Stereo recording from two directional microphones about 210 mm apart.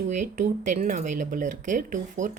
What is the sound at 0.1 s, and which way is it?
Speech, 35° right (ahead or behind).